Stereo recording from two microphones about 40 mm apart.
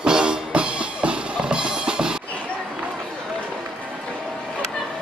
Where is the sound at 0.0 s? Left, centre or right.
Right.